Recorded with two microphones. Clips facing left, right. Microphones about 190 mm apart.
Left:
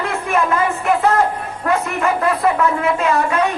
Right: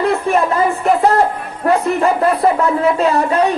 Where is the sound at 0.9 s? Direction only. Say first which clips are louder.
Right 2 dB; 35° right (ahead or behind).